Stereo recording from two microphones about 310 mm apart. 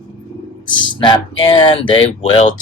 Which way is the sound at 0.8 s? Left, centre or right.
Centre.